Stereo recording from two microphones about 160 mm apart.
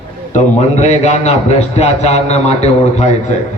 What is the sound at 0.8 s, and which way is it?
A man's voice, 45° left (ahead or behind).